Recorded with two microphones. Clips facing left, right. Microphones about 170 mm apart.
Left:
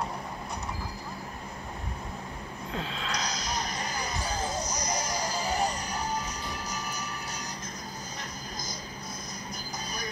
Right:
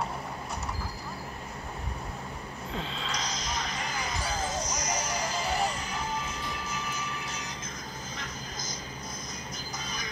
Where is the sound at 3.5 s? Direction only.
40° left (ahead or behind).